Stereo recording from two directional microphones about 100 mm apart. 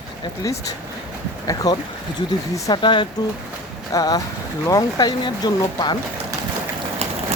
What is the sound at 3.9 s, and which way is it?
Speech, 35° left (ahead or behind).